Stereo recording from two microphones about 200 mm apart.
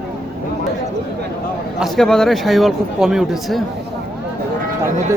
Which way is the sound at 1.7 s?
Centre (ahead or behind).